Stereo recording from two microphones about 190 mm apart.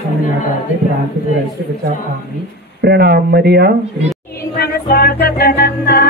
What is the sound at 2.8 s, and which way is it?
Speech, 60° right (ahead or behind).